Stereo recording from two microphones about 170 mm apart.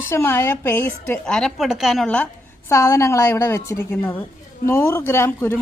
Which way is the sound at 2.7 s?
15° left (ahead or behind).